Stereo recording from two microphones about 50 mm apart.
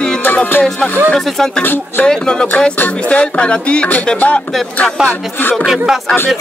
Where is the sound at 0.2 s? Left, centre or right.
Left.